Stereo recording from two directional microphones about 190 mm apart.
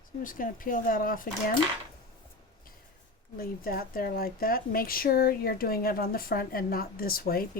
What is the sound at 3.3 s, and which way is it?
A woman's voice, 50° left (ahead or behind).